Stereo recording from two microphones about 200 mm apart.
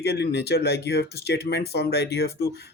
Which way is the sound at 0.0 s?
55° left (ahead or behind).